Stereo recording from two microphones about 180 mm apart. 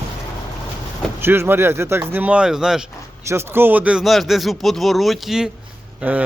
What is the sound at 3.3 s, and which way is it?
A man's voice, 15° right (ahead or behind).